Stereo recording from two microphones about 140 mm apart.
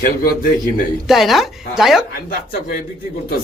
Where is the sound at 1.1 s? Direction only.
Centre (ahead or behind).